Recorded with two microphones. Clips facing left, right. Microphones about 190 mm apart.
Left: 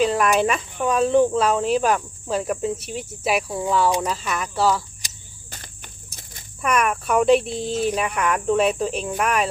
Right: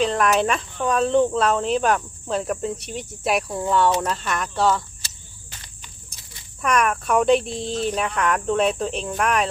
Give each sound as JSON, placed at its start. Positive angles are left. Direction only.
{"t": 0.0, "sound": "speech", "side_deg": 5}
{"t": 5.0, "sound": "cricket", "side_deg": 15}
{"t": 5.5, "sound": "cricket", "side_deg": 45}
{"t": 6.6, "sound": "speech", "side_deg": 5}